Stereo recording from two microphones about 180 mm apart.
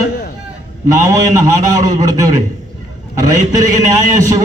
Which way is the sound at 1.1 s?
20° right (ahead or behind).